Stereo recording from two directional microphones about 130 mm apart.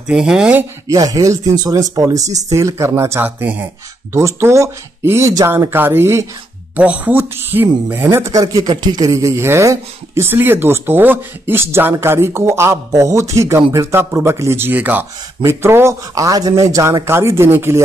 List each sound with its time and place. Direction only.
0.0 s speech: 5° right (ahead or behind)
0.8 s speech: 30° right (ahead or behind)